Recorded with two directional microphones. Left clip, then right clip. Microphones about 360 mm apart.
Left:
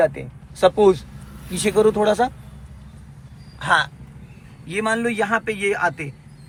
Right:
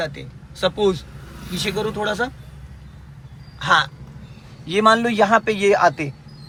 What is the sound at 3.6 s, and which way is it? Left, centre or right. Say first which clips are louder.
Speech: right 1 dB; centre.